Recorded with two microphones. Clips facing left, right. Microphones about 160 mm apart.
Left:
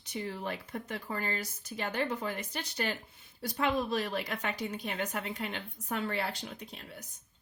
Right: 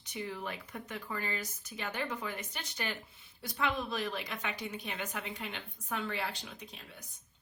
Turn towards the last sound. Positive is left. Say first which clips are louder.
# left 3 dB
turn(degrees=40)  # may be behind; listen again after turning